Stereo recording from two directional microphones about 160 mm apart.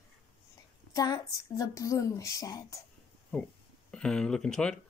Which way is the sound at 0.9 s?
20° left (ahead or behind).